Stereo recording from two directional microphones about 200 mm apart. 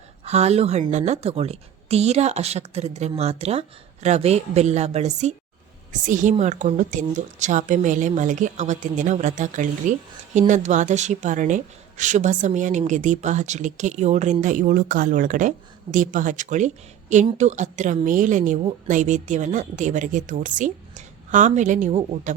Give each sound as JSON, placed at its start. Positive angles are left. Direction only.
{"t": 0.3, "sound": "a woman's voice", "side_deg": -35}